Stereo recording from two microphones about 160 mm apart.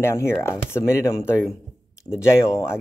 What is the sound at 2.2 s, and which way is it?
Speech, 20° left (ahead or behind).